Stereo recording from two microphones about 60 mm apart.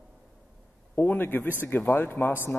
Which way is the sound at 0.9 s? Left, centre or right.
Left.